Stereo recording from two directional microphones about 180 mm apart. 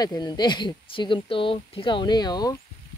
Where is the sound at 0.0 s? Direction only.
20° left (ahead or behind).